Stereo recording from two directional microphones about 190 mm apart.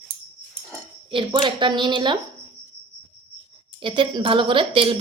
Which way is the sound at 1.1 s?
25° right (ahead or behind).